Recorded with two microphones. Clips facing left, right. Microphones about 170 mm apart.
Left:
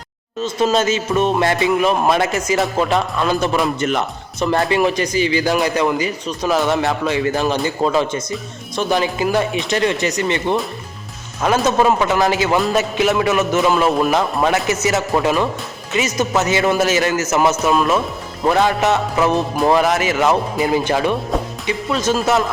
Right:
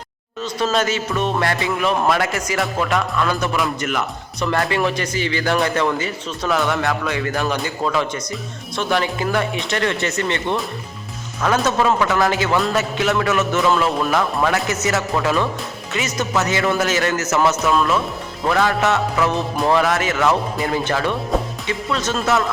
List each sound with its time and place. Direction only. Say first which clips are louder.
0.4 s music: left 3 dB; 20° left (ahead or behind)